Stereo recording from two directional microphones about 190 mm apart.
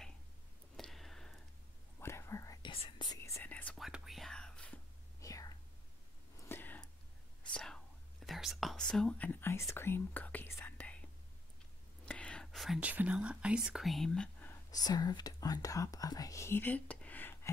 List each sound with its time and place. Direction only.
0.7 s a sound: centre (ahead or behind)
2.0 s whispering: 15° left (ahead or behind)
3.2 s whispering: 15° left (ahead or behind)
5.2 s whispering: 20° left (ahead or behind)
6.5 s a sound: 10° left (ahead or behind)
7.5 s whispering: 5° left (ahead or behind)
12.1 s speech: 5° left (ahead or behind)
14.7 s speech: 20° left (ahead or behind)